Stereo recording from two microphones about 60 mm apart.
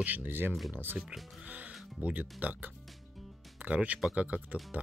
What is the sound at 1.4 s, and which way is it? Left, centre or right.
Music, right.